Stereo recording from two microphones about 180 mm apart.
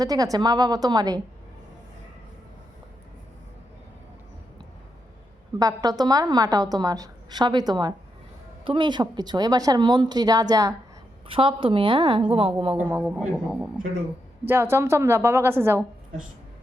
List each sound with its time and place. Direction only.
0.0 s a woman's voice: 20° right (ahead or behind)
5.5 s a woman's voice: 20° right (ahead or behind)
12.7 s a woman's voice: 10° right (ahead or behind)